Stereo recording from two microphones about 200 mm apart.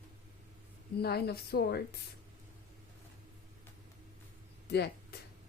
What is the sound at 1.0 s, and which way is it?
Speech, 55° left (ahead or behind).